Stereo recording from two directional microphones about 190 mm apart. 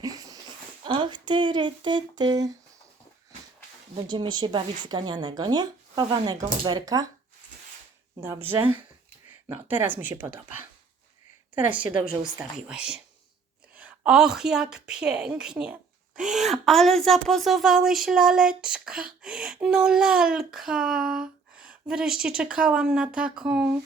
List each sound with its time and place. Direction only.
0.0 s dog: 20° right (ahead or behind)
0.9 s speech: 25° right (ahead or behind)
4.1 s a woman's voice: 25° right (ahead or behind)
8.2 s speech: 10° right (ahead or behind)
9.5 s speech: 10° right (ahead or behind)